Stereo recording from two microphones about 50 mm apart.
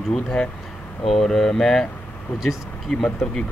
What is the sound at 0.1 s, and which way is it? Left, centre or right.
Speech, centre.